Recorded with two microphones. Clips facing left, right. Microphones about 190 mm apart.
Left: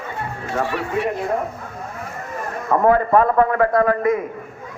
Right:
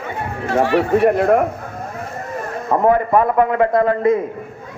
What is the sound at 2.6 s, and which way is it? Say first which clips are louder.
A man's voice: right 1 dB; 20° right (ahead or behind).